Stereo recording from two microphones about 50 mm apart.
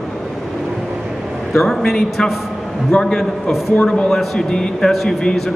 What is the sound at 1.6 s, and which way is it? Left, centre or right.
A man's voice, centre.